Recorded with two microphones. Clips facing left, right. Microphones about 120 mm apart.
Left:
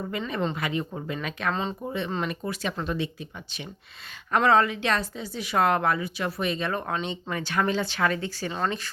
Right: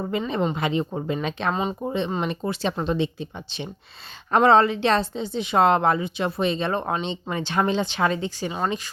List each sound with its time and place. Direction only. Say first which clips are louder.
0.0 s speech: right 4 dB; 25° right (ahead or behind)